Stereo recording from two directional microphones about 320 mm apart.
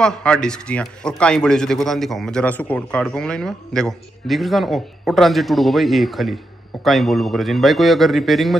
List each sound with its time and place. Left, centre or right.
0.0 s a man's voice: centre